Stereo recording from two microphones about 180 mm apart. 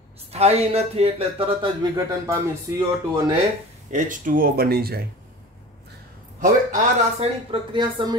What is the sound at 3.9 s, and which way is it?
Speech, 45° right (ahead or behind).